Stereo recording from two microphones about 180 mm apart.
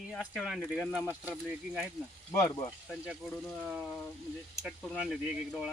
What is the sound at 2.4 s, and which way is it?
Speech, 25° left (ahead or behind).